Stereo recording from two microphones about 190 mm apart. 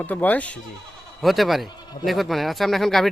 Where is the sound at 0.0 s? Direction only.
10° left (ahead or behind).